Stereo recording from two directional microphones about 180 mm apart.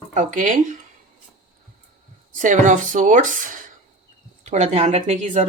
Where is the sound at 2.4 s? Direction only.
45° right (ahead or behind).